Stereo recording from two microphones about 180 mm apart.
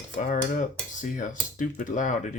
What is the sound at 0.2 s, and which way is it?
Cutlery, 45° left (ahead or behind).